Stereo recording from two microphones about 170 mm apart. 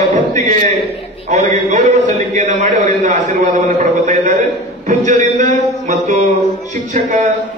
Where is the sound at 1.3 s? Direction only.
45° right (ahead or behind).